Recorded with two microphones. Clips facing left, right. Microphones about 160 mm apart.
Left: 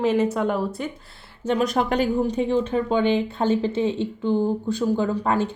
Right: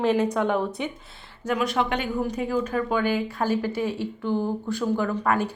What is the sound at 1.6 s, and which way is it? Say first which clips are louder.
Speech: left 4 dB; 40° left (ahead or behind).